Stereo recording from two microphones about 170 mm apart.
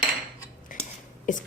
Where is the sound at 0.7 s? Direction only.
50° left (ahead or behind).